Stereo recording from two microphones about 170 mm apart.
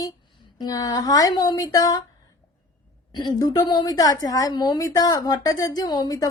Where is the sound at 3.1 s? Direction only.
25° left (ahead or behind).